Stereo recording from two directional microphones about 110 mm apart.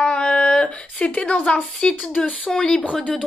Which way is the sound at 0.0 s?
10° left (ahead or behind).